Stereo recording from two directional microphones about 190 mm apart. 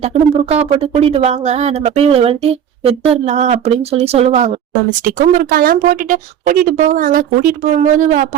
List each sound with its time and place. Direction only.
0.0 s speech: 35° right (ahead or behind)